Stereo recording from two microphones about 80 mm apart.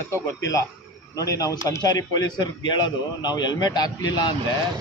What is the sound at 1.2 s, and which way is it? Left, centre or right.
Speech, left.